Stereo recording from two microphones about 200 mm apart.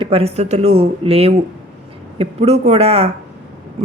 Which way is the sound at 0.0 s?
30° right (ahead or behind).